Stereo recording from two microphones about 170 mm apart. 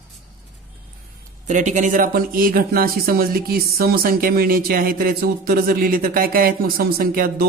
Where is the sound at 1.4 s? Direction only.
45° right (ahead or behind).